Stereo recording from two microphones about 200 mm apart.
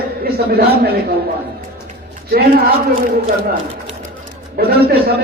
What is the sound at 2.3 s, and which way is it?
Speech, 50° right (ahead or behind).